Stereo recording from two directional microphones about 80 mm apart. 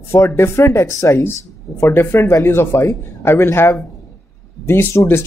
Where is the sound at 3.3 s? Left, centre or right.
Left.